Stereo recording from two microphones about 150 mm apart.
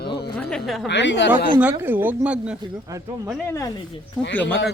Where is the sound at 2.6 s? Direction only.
25° right (ahead or behind).